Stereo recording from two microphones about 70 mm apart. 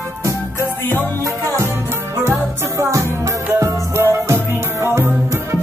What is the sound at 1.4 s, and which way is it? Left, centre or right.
Music, right.